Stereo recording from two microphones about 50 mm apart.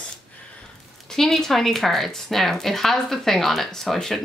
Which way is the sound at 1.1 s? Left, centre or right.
Centre.